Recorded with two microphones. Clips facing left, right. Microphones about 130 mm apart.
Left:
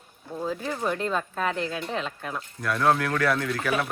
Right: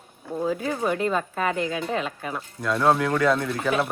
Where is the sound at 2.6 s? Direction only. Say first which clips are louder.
Right 2 dB; 20° right (ahead or behind).